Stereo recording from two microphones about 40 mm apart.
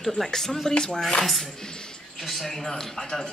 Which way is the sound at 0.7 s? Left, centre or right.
Left.